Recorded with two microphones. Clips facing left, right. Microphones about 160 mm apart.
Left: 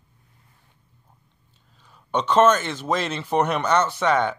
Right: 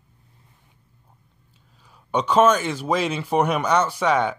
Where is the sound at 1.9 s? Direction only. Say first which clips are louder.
Right 1 dB; 10° right (ahead or behind).